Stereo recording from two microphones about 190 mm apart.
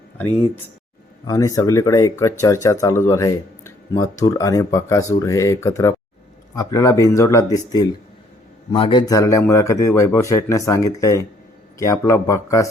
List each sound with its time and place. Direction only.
1.3 s speech: 15° left (ahead or behind)